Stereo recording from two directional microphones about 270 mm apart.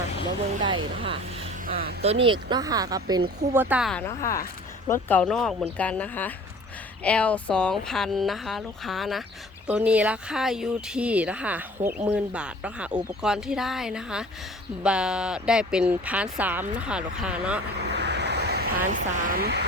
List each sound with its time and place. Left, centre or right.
0.6 s speech: centre
1.6 s speech: right
2.0 s speech: centre
17.7 s speech: right